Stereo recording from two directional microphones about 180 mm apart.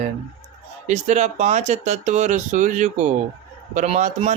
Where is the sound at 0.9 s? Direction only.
40° right (ahead or behind).